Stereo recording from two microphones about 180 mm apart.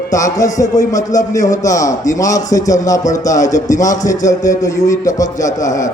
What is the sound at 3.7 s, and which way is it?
Speech, 40° left (ahead or behind).